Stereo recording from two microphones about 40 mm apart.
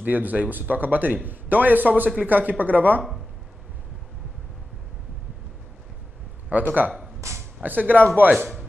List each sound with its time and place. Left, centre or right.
0.0 s a man's voice: right
6.5 s a man's voice: right